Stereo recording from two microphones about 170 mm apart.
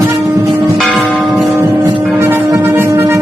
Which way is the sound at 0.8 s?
Centre (ahead or behind).